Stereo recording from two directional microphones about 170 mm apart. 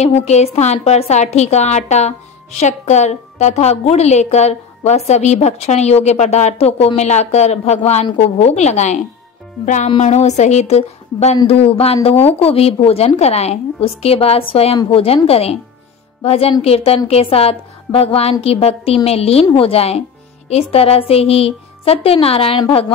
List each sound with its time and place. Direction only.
0.0 s a woman's voice: 40° left (ahead or behind)